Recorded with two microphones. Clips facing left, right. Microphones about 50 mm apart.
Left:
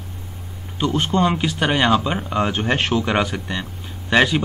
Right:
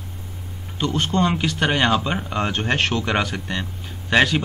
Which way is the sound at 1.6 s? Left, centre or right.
Centre.